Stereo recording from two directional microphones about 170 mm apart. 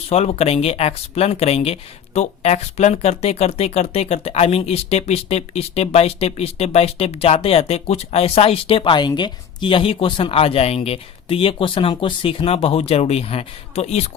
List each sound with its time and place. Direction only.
0.1 s speech: 35° left (ahead or behind)